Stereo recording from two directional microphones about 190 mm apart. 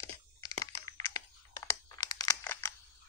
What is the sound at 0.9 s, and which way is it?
Computer keyboard, 15° left (ahead or behind).